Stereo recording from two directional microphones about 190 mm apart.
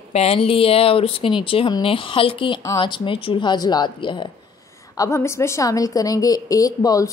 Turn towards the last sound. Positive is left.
turn(degrees=20)  # may be behind; listen again after turning